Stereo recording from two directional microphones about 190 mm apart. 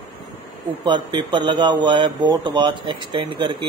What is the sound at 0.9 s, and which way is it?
Speech, 25° right (ahead or behind).